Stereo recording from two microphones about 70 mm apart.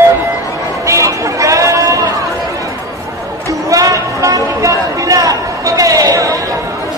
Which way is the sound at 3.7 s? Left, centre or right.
Right.